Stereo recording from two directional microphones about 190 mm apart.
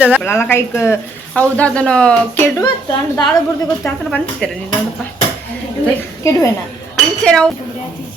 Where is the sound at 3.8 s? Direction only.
5° left (ahead or behind).